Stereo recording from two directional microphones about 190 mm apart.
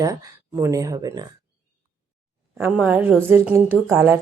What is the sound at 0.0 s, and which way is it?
Speech, 20° right (ahead or behind).